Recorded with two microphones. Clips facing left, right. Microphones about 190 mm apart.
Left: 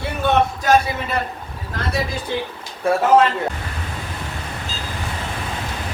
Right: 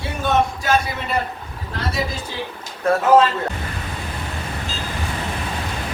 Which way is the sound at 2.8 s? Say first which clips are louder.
Even; 10° left (ahead or behind).